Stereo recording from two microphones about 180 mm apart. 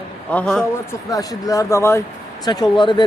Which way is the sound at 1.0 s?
20° left (ahead or behind).